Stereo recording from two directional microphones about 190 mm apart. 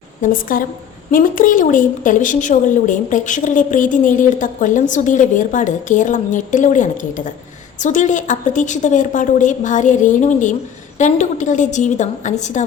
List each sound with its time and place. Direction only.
0.2 s a woman's voice: 45° left (ahead or behind)